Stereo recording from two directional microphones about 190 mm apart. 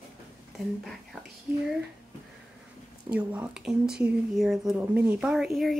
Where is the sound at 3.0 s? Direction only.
5° right (ahead or behind).